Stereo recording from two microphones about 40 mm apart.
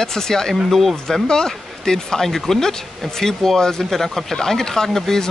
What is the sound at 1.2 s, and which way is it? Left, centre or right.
Speech, centre.